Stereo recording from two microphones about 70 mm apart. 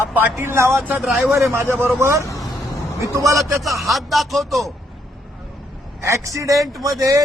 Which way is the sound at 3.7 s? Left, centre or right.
Centre.